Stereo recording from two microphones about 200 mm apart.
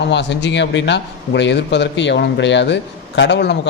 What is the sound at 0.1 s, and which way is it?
A man's voice, 60° left (ahead or behind).